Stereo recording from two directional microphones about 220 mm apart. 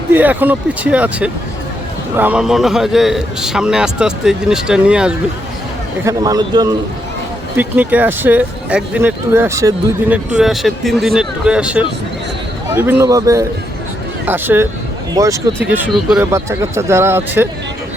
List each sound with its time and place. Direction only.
0.1 s a man's voice: 10° right (ahead or behind)
6.1 s speech: 15° right (ahead or behind)